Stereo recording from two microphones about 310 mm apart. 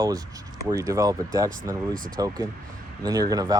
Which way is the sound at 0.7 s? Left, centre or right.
Centre.